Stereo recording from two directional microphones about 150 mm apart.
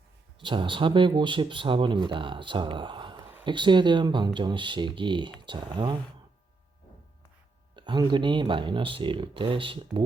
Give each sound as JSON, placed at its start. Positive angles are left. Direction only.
{"t": 0.4, "sound": "speech", "side_deg": -35}
{"t": 7.8, "sound": "speech", "side_deg": -30}